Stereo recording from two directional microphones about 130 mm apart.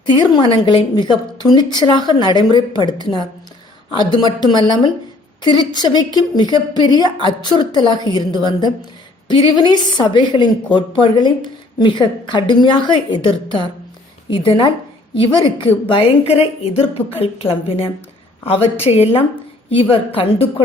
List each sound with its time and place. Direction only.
0.0 s a woman's voice: 35° left (ahead or behind)